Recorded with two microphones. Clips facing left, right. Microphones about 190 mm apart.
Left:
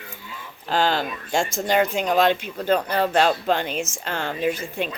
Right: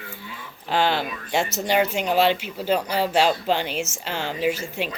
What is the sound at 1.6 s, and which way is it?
Speech, 5° right (ahead or behind).